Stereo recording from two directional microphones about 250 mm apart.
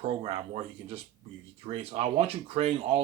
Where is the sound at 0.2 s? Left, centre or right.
Right.